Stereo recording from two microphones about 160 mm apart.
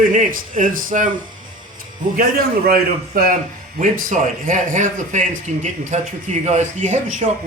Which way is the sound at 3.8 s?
55° right (ahead or behind).